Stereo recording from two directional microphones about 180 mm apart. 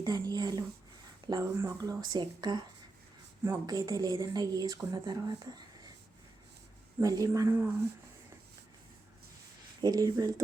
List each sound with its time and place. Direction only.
0.0 s speech: 20° right (ahead or behind)
7.0 s speech: 20° right (ahead or behind)
9.8 s speech: 20° right (ahead or behind)